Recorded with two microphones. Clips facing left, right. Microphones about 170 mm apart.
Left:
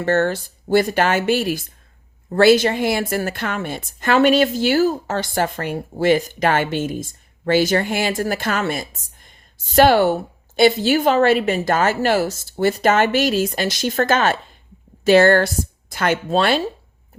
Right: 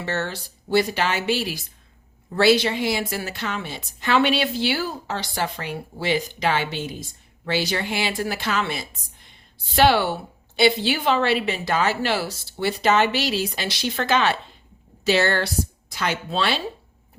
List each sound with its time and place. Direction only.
0.0 s a woman's voice: 50° left (ahead or behind)